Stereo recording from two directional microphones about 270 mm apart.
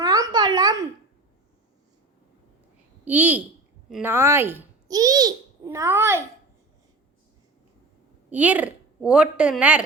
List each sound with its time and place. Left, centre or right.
0.0 s a sound: centre
3.0 s a woman's voice: centre
8.3 s a woman's voice: centre